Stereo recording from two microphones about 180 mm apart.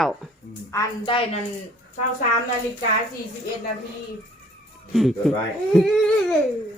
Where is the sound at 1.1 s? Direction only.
30° left (ahead or behind).